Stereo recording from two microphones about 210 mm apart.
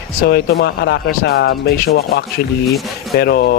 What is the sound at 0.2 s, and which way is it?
Speech, 50° left (ahead or behind).